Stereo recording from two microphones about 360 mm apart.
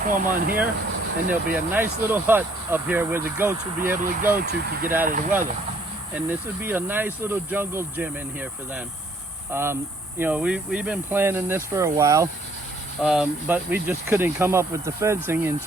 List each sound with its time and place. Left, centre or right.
0.0 s speech: right
1.3 s speech: centre
4.4 s speech: right
6.1 s speech: centre